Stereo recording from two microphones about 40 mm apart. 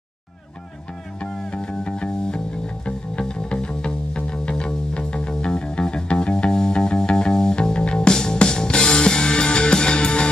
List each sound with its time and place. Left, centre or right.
1.2 s music: centre